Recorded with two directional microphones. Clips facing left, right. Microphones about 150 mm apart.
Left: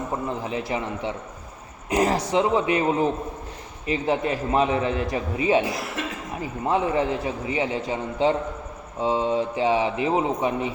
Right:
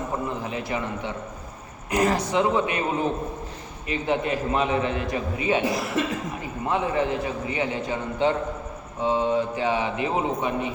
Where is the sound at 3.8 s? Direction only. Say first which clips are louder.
Left 1 dB; 35° left (ahead or behind).